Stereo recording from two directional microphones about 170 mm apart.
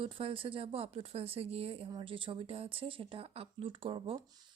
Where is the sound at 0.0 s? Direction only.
30° right (ahead or behind).